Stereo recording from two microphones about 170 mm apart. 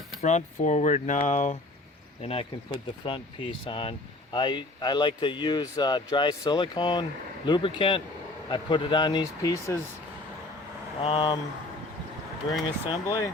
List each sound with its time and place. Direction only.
0.2 s speech: 45° left (ahead or behind); by 9.7 s 20° left (ahead or behind)
11.0 s speech: 30° left (ahead or behind)
12.9 s speech: 20° left (ahead or behind)